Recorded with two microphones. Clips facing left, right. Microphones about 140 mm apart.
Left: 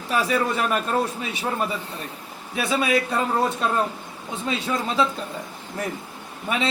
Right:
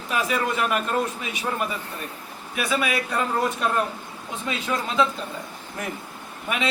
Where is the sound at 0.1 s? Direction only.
35° left (ahead or behind).